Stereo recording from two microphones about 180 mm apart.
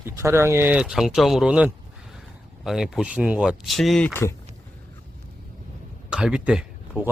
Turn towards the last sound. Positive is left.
turn(degrees=-10)  # may be behind; listen again after turning